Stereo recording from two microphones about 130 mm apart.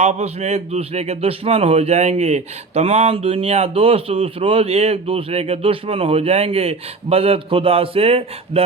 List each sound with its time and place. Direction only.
0.0 s speech: 55° right (ahead or behind)